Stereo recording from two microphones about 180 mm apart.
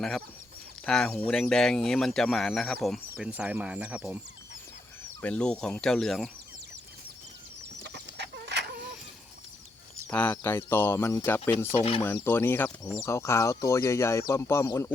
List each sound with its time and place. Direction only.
0.9 s speech: 5° left (ahead or behind)
5.2 s speech: 5° left (ahead or behind)
7.9 s a sound: 70° right (ahead or behind)
10.1 s speech: 10° left (ahead or behind)
11.7 s speech: 35° left (ahead or behind)
12.0 s speech: 10° left (ahead or behind)